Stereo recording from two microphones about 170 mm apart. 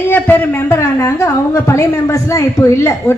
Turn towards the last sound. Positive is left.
turn(degrees=15)  # may be behind; listen again after turning